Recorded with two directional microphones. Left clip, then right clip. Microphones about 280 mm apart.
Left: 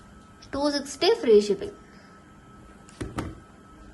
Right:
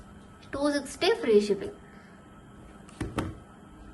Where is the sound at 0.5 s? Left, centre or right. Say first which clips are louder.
Left 2 dB; centre.